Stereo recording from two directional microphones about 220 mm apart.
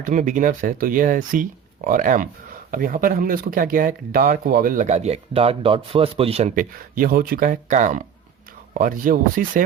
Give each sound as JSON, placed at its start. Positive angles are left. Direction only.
{"t": 0.0, "sound": "speech", "side_deg": -35}